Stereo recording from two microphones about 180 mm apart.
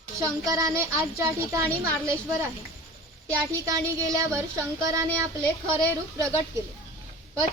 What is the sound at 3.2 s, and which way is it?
A woman's voice, 20° right (ahead or behind).